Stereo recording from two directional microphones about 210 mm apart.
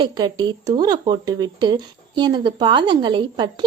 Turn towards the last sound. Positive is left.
turn(degrees=-20)  # may be behind; listen again after turning